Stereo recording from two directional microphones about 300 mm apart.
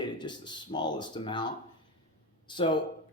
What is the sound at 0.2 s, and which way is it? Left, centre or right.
Speech, centre.